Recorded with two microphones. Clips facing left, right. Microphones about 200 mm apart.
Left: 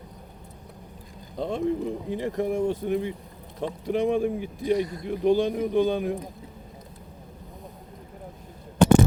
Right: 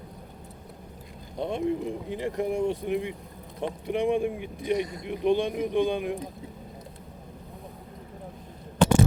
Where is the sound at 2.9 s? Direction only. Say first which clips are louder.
Left 2 dB; 35° left (ahead or behind).